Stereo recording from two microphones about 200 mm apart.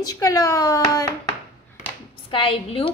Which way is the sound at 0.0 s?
15° left (ahead or behind).